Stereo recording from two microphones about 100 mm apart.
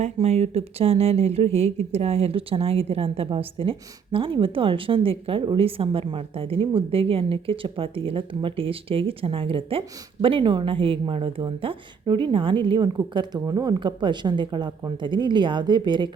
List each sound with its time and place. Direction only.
0.2 s a woman's voice: 90° right; by 12.9 s 55° right (ahead or behind)
13.4 s speech: 35° right (ahead or behind)
13.7 s speech: 50° right (ahead or behind)